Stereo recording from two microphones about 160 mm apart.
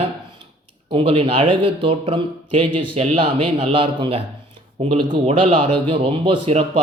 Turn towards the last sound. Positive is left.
turn(degrees=-40)  # may be behind; listen again after turning